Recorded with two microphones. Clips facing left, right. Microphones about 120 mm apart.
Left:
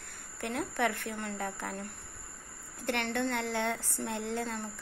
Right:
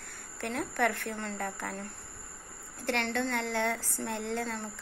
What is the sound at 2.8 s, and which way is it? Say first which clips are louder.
A woman's voice: right 1 dB; 15° left (ahead or behind).